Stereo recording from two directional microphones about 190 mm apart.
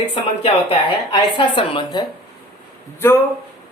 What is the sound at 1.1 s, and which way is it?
Speech, 25° left (ahead or behind).